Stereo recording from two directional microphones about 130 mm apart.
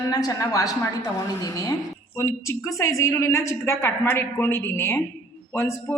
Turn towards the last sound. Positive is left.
turn(degrees=20)  # may be behind; listen again after turning